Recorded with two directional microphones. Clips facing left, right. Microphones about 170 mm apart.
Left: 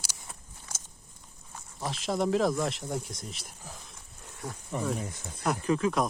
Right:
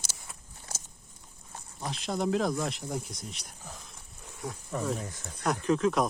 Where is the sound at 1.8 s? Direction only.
Centre (ahead or behind).